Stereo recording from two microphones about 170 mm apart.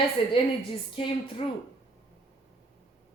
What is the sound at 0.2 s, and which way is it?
Speech, 30° left (ahead or behind).